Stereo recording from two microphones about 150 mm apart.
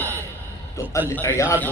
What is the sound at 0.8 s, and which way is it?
Speech, 20° left (ahead or behind).